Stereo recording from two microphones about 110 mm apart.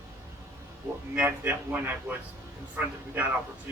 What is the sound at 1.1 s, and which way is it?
A man's voice, 15° right (ahead or behind).